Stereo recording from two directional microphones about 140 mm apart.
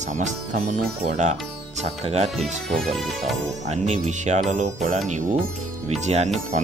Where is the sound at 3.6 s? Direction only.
55° right (ahead or behind).